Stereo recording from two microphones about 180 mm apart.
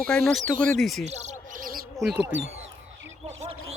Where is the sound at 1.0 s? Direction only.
40° right (ahead or behind).